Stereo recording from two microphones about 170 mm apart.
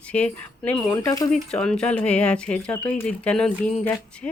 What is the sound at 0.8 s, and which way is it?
Speech, 20° left (ahead or behind).